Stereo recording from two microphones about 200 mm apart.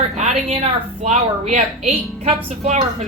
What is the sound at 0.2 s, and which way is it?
A woman's voice, 30° right (ahead or behind).